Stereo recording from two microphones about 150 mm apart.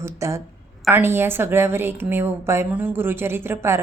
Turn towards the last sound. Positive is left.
turn(degrees=-15)  # may be behind; listen again after turning